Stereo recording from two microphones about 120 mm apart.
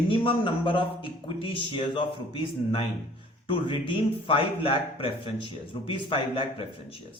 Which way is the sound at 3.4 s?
45° left (ahead or behind).